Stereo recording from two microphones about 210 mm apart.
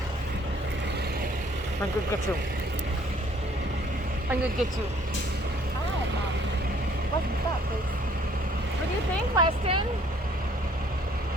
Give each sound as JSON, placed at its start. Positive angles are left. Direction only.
{"t": 9.3, "sound": "speech", "side_deg": -20}